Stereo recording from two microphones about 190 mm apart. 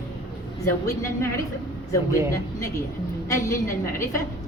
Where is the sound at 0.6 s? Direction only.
15° left (ahead or behind).